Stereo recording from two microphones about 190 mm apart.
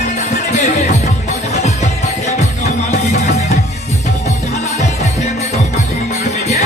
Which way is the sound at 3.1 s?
35° left (ahead or behind).